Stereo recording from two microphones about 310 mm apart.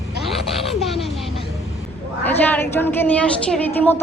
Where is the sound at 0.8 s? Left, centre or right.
Centre.